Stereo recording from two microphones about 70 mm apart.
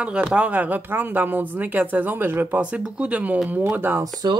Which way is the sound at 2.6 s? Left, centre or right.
Centre.